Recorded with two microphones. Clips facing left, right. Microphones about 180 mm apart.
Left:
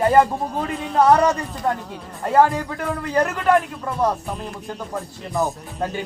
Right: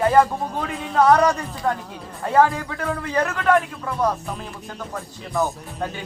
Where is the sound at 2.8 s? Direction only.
Centre (ahead or behind).